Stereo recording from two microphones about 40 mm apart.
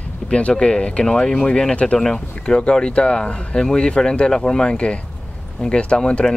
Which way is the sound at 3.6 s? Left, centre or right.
Left.